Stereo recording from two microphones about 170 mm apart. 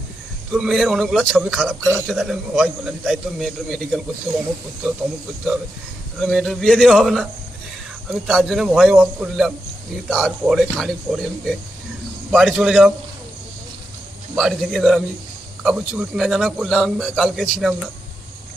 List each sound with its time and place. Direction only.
0.5 s a man's voice: 5° right (ahead or behind)
6.2 s a man's voice: centre (ahead or behind)
14.3 s a man's voice: centre (ahead or behind)